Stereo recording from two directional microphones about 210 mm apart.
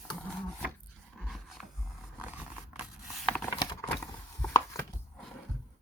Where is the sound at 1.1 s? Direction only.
Centre (ahead or behind).